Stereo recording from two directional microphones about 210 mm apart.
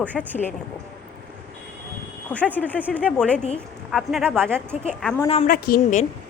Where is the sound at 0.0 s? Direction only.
5° left (ahead or behind).